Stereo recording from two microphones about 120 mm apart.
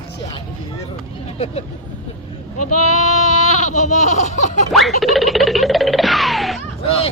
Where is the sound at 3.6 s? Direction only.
85° left.